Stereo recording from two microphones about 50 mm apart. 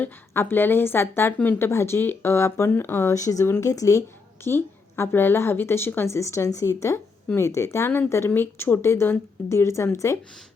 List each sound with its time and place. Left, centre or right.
0.3 s a woman's voice: left
2.6 s a woman's voice: left
3.1 s speech: left
4.4 s a woman's voice: left
6.1 s a woman's voice: left
8.3 s a woman's voice: left